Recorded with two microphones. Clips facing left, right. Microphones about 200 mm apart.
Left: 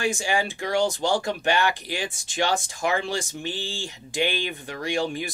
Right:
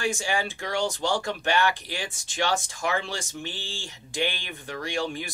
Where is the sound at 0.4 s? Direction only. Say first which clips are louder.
Left 4 dB; 15° left (ahead or behind).